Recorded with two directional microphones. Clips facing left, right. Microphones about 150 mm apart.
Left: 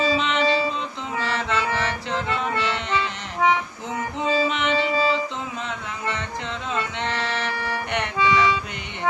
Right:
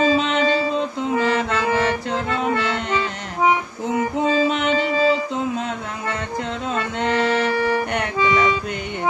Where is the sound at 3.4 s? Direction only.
10° right (ahead or behind).